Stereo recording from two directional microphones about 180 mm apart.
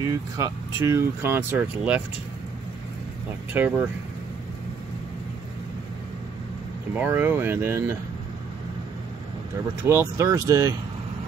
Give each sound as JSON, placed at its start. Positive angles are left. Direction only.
{"t": 0.0, "sound": "speech", "side_deg": -20}
{"t": 3.5, "sound": "speech", "side_deg": -10}
{"t": 6.9, "sound": "speech", "side_deg": -10}
{"t": 9.8, "sound": "speech", "side_deg": -15}